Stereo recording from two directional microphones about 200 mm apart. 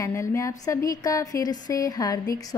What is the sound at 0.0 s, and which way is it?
A woman's voice, 15° left (ahead or behind).